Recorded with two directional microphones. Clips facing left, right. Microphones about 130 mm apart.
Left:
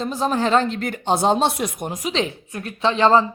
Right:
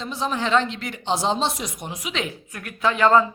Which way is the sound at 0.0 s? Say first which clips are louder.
Left 5 dB; 45° left (ahead or behind).